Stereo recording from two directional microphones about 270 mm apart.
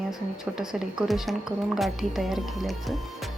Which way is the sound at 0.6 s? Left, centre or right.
Centre.